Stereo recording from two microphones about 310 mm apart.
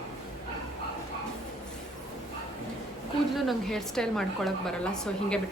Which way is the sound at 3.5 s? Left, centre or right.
Centre.